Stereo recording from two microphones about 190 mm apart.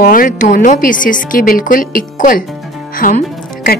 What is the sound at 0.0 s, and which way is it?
Speech, 45° left (ahead or behind).